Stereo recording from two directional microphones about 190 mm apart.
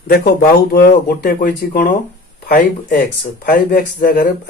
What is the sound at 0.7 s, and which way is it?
Speech, 55° left (ahead or behind).